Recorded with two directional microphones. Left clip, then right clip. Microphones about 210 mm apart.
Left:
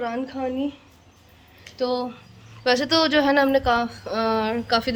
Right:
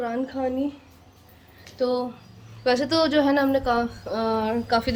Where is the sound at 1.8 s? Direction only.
5° left (ahead or behind).